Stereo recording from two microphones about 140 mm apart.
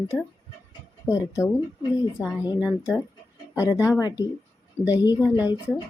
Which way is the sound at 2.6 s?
5° right (ahead or behind).